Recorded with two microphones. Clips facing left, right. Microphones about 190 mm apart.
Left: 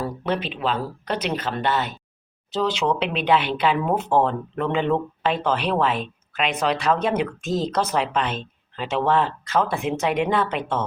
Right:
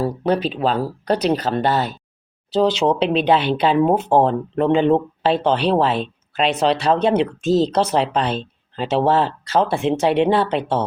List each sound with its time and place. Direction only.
0.0 s speech: 35° right (ahead or behind)